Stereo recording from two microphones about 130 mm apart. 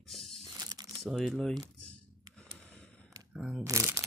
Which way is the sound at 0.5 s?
30° right (ahead or behind).